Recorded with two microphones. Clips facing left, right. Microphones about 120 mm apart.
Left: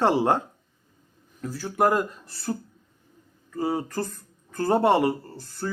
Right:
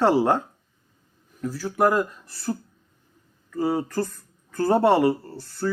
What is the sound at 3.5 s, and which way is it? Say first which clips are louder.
Speech: right 3 dB; 20° left (ahead or behind).